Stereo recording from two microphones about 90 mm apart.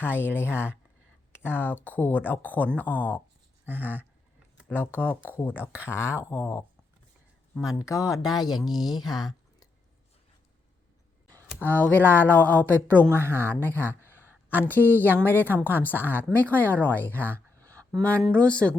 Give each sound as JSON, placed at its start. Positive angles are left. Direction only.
{"t": 0.0, "sound": "speech", "side_deg": 25}
{"t": 7.6, "sound": "speech", "side_deg": 40}
{"t": 11.3, "sound": "speech", "side_deg": 20}
{"t": 13.2, "sound": "speech", "side_deg": -25}
{"t": 13.5, "sound": "speech", "side_deg": 20}